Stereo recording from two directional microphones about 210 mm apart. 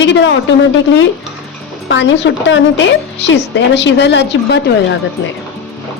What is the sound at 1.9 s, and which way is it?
Speech, 60° left (ahead or behind).